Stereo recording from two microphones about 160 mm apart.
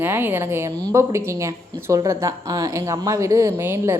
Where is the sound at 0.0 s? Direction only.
15° right (ahead or behind).